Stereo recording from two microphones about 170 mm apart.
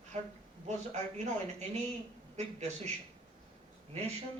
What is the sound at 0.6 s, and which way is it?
A man's voice, 40° right (ahead or behind).